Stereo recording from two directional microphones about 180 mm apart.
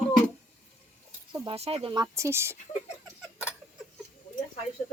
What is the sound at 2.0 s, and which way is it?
Speech, 15° right (ahead or behind).